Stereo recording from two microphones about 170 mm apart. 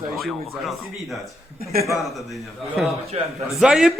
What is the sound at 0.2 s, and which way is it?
Speech, centre (ahead or behind).